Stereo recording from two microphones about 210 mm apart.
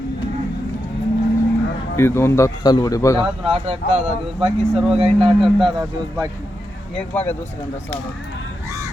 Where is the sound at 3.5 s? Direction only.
30° right (ahead or behind).